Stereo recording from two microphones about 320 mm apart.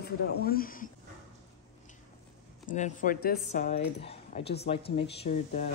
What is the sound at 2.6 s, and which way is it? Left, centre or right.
Speech, left.